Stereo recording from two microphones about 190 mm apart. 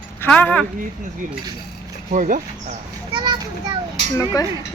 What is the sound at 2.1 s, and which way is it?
Speech, 40° right (ahead or behind).